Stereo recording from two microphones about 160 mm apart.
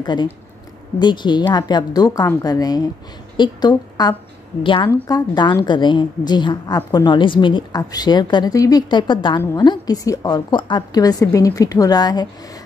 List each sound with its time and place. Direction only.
0.0 s a woman's voice: 30° left (ahead or behind)
9.4 s a woman's voice: 15° left (ahead or behind)